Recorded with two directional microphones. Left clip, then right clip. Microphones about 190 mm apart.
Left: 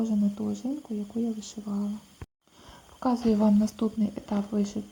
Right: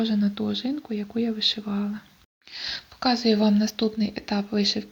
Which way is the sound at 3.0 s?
5° right (ahead or behind).